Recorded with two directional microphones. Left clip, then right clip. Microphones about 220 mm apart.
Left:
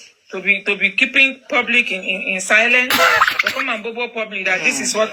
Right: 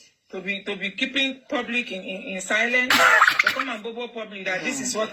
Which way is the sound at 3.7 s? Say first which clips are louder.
Left 9 dB; 10° left (ahead or behind).